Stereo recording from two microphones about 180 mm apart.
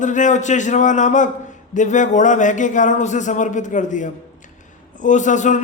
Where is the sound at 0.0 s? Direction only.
45° left (ahead or behind).